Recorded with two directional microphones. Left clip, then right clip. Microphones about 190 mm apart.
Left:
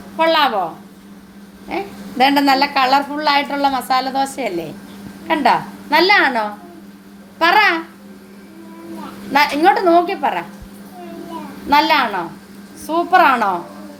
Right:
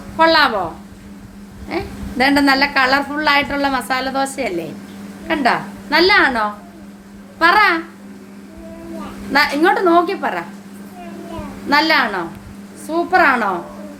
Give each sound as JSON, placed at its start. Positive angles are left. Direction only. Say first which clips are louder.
{"t": 0.2, "sound": "a woman's voice", "louder": "right 2 dB", "side_deg": -10}
{"t": 1.7, "sound": "a woman's voice", "louder": "even", "side_deg": -10}
{"t": 9.3, "sound": "a woman's voice", "louder": "left 1 dB", "side_deg": -5}
{"t": 11.7, "sound": "a woman's voice", "louder": "left 1 dB", "side_deg": -5}